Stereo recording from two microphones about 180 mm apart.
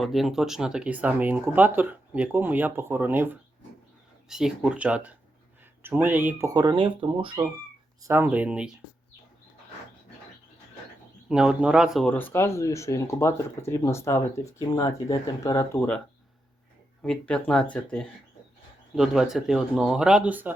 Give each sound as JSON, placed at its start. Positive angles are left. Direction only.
{"t": 0.0, "sound": "speech", "side_deg": 0}
{"t": 8.0, "sound": "speech", "side_deg": -15}
{"t": 11.3, "sound": "speech", "side_deg": -5}
{"t": 12.0, "sound": "speech", "side_deg": 10}
{"t": 17.0, "sound": "speech", "side_deg": 5}